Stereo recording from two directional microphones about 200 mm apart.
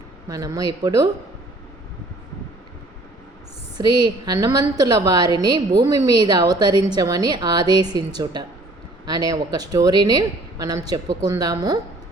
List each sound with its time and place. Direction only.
0.3 s a woman's voice: 20° right (ahead or behind)
3.8 s a woman's voice: 20° right (ahead or behind)